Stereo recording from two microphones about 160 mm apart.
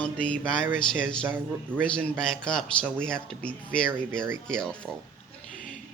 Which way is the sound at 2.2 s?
5° left (ahead or behind).